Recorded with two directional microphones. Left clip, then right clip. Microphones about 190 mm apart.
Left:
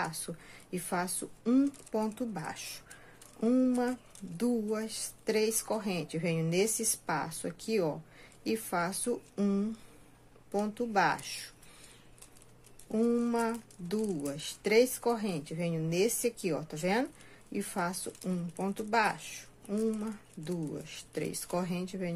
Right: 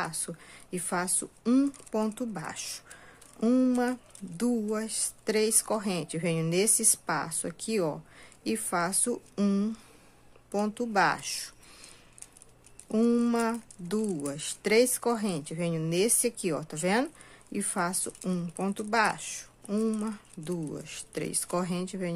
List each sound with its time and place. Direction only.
0.0 s speech: 10° right (ahead or behind)
12.9 s speech: 15° right (ahead or behind)